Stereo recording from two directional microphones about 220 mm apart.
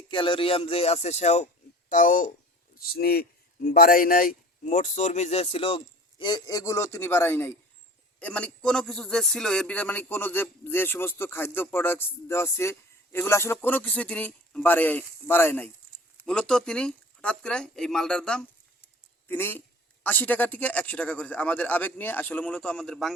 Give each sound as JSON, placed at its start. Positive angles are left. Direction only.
{"t": 0.1, "sound": "a man's voice", "side_deg": 20}